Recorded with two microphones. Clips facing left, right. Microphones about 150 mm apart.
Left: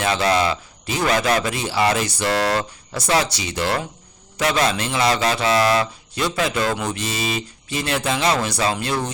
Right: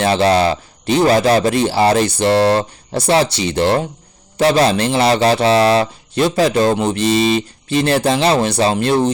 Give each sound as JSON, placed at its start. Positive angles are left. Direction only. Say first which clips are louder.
{"t": 0.0, "sound": "speech", "louder": "right 6 dB", "side_deg": -30}